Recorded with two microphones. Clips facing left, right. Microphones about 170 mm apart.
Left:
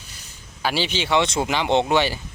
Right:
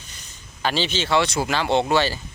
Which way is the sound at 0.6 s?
10° left (ahead or behind).